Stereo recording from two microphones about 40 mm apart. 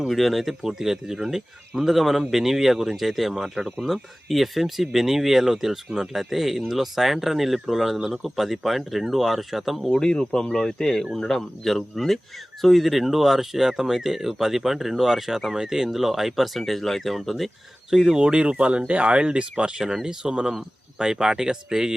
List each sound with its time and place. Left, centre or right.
0.1 s speech: centre
10.0 s speech: centre
17.9 s speech: centre
18.2 s speech: right
19.8 s speech: centre